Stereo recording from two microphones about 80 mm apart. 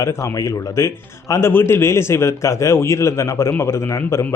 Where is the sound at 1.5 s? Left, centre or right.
Left.